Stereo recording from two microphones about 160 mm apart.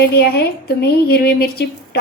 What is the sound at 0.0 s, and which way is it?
A woman's voice, 75° left (ahead or behind).